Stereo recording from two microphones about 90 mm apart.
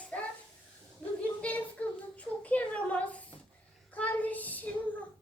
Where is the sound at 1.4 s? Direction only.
15° left (ahead or behind).